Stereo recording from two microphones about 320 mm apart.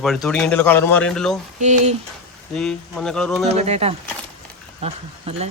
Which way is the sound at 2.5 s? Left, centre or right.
Centre.